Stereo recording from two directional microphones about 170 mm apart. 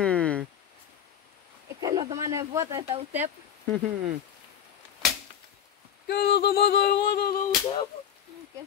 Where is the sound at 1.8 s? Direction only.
25° right (ahead or behind).